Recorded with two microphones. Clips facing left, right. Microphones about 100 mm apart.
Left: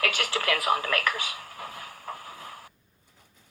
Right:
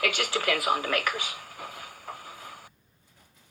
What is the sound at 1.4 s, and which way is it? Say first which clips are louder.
Vehicle: left 1 dB; 40° left (ahead or behind).